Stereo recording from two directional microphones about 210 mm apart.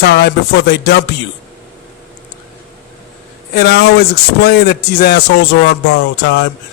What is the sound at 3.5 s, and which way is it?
A man's voice, 50° left (ahead or behind).